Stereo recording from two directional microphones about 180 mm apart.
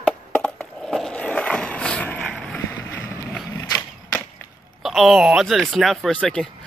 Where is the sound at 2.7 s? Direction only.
15° left (ahead or behind).